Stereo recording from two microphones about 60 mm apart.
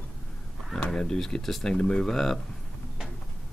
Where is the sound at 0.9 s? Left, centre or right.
Centre.